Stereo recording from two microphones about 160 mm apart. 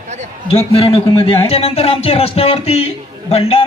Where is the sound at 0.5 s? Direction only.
40° left (ahead or behind).